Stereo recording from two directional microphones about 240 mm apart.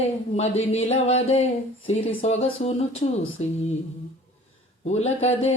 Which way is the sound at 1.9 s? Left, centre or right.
Left.